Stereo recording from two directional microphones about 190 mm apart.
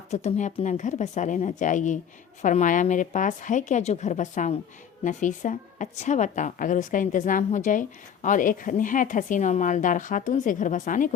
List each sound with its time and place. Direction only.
0.1 s a woman's voice: 35° left (ahead or behind)